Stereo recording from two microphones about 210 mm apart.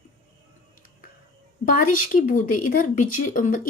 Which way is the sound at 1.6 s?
40° left (ahead or behind).